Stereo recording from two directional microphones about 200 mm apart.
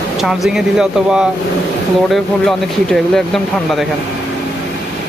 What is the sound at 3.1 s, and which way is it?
Speech, centre (ahead or behind).